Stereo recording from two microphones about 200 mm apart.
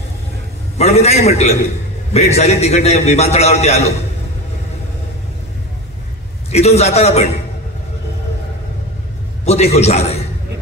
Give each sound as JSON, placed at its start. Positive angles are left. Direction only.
{"t": 0.7, "sound": "a man's voice", "side_deg": 30}
{"t": 6.5, "sound": "a man's voice", "side_deg": 30}
{"t": 9.4, "sound": "a man's voice", "side_deg": 30}